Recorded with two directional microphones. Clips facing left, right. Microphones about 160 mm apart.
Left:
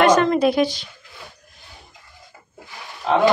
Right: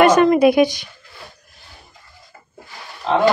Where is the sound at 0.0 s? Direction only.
10° right (ahead or behind).